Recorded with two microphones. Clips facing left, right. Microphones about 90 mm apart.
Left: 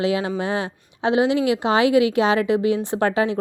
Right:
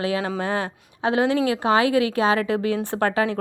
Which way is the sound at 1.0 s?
20° left (ahead or behind).